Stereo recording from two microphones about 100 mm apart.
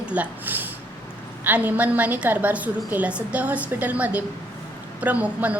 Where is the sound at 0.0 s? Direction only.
15° right (ahead or behind).